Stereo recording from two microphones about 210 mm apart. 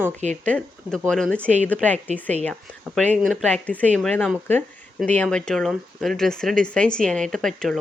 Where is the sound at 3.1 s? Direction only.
Centre (ahead or behind).